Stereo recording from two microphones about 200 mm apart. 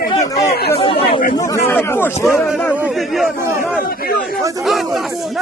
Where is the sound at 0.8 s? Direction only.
25° left (ahead or behind).